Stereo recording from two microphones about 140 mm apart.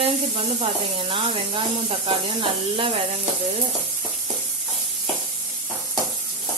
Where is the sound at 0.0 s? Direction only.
45° right (ahead or behind).